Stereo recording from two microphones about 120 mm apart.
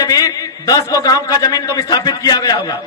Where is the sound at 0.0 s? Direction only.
35° left (ahead or behind).